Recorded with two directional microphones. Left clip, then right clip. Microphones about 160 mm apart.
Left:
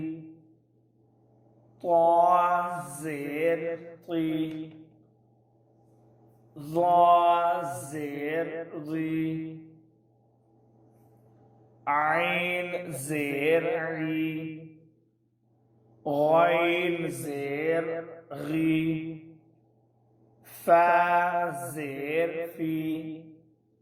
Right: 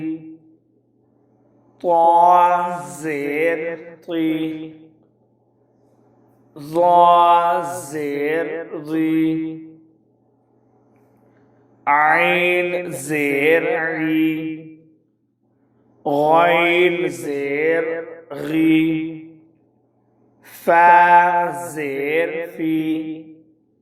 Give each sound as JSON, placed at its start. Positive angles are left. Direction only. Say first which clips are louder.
{"t": 0.0, "sound": "music", "louder": "right 9 dB", "side_deg": -25}
{"t": 1.8, "sound": "mantra", "louder": "right 8 dB", "side_deg": -25}
{"t": 6.5, "sound": "mantra", "louder": "right 9 dB", "side_deg": -25}
{"t": 11.8, "sound": "mantra", "louder": "right 11 dB", "side_deg": -25}
{"t": 16.0, "sound": "mantra", "louder": "right 8 dB", "side_deg": -25}
{"t": 20.4, "sound": "mantra", "louder": "right 8 dB", "side_deg": -20}